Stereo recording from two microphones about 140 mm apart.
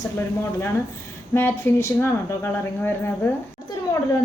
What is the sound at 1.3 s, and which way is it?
Speech, 15° left (ahead or behind).